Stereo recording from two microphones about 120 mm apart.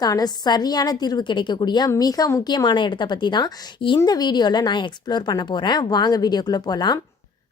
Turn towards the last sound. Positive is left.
turn(degrees=35)  # may be behind; listen again after turning